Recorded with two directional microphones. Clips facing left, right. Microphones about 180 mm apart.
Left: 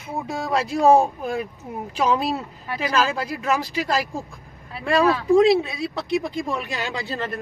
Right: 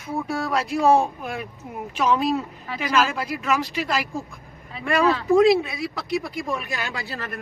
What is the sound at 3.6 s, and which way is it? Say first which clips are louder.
Speech: left 1 dB; 35° left (ahead or behind).